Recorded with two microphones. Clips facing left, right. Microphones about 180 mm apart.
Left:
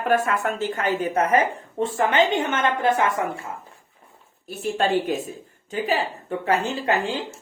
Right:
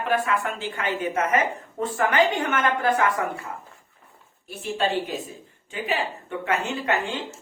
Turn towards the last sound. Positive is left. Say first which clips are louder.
# left 2 dB
turn(degrees=35)  # may be behind; listen again after turning